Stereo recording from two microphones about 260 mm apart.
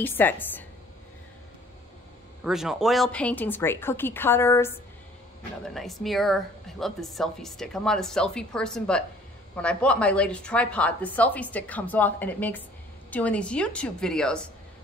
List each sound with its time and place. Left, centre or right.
0.0 s speech: centre
2.4 s a woman's voice: centre